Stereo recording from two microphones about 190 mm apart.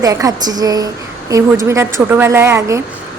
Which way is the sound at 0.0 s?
20° right (ahead or behind).